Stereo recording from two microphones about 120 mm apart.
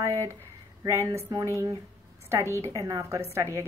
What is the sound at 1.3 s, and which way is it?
Speech, 25° right (ahead or behind).